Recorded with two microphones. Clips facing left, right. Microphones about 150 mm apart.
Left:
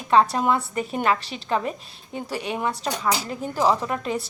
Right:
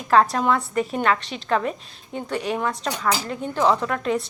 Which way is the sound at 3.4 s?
5° left (ahead or behind).